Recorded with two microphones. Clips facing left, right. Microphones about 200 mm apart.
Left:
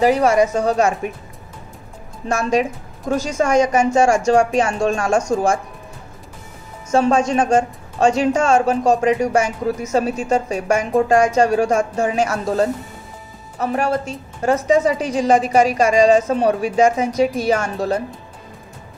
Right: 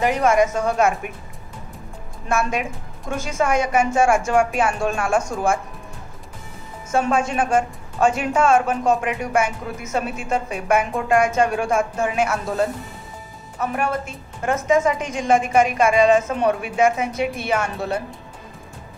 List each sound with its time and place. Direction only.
0.0 s a woman's voice: 35° left (ahead or behind)
2.2 s a woman's voice: 40° left (ahead or behind)
6.9 s a woman's voice: 40° left (ahead or behind)